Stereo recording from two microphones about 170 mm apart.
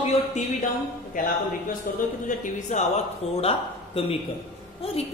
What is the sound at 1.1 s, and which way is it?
Speech, 55° left (ahead or behind).